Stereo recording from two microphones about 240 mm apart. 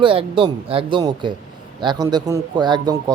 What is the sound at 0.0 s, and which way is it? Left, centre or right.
Speech, right.